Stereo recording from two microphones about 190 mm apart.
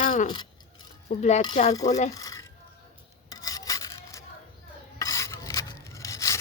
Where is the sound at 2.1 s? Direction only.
15° left (ahead or behind).